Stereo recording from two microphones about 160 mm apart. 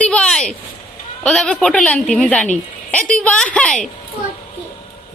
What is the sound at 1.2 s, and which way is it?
A woman's voice, 5° left (ahead or behind).